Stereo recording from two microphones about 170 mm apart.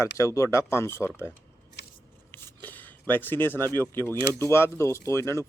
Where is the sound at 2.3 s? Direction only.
10° left (ahead or behind).